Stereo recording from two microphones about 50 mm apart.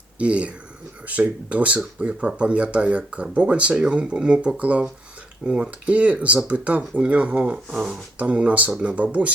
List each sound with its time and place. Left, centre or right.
0.2 s speech: right
7.7 s speech: centre
8.2 s speech: right